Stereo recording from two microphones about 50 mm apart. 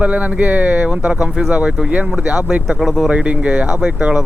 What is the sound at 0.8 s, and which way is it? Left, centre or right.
Speech, right.